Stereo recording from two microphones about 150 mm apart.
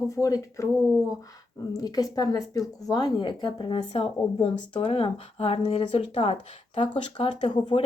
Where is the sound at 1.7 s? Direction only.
25° left (ahead or behind).